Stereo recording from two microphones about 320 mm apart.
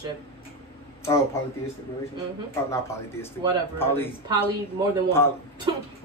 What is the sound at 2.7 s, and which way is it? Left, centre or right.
Speech, centre.